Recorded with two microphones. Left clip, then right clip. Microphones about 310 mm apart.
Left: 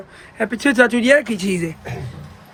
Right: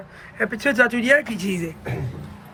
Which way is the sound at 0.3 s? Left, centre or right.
Centre.